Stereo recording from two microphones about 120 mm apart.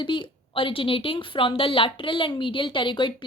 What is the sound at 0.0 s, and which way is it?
A woman's voice, 40° left (ahead or behind).